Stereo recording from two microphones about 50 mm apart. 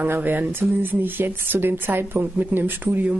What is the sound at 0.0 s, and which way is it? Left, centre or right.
Speech, right.